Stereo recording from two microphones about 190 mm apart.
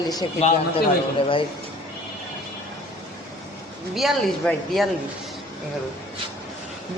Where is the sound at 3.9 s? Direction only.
Centre (ahead or behind).